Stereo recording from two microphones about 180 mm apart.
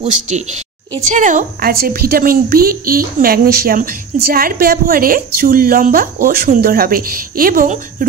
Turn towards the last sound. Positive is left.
turn(degrees=-45)  # may be behind; listen again after turning